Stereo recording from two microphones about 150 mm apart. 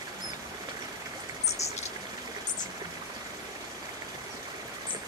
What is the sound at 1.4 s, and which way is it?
Stream, 45° left (ahead or behind).